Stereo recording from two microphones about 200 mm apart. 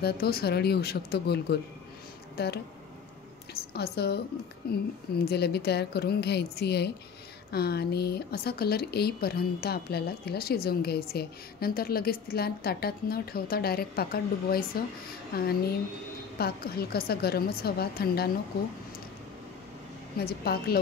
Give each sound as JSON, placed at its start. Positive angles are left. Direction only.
{"t": 0.0, "sound": "speech", "side_deg": 50}
{"t": 20.2, "sound": "speech", "side_deg": 50}